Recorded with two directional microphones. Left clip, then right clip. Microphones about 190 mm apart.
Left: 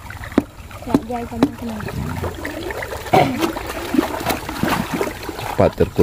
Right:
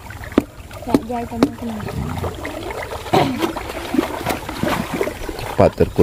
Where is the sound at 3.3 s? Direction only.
25° left (ahead or behind).